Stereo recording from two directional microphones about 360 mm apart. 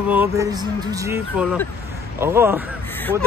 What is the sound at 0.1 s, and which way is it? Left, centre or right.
Speech, centre.